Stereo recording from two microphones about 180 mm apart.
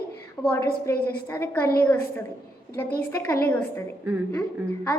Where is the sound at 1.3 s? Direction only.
10° left (ahead or behind).